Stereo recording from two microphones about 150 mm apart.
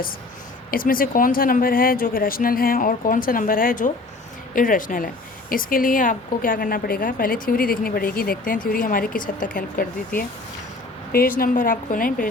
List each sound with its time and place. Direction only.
0.7 s speech: 70° left (ahead or behind)
11.1 s speech: 75° left (ahead or behind)